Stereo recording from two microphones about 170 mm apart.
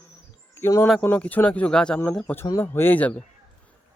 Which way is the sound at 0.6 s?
15° left (ahead or behind).